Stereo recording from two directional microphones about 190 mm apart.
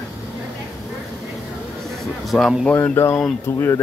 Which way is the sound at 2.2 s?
Centre (ahead or behind).